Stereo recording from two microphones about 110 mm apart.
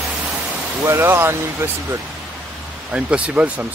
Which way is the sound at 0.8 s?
25° right (ahead or behind).